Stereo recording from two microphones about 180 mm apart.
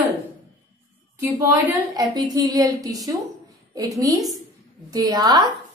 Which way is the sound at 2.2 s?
20° right (ahead or behind).